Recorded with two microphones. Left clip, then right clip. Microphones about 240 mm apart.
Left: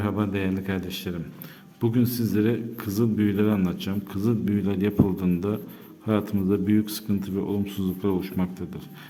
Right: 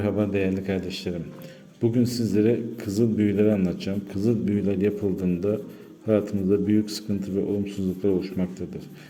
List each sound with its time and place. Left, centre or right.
0.0 s a man's voice: centre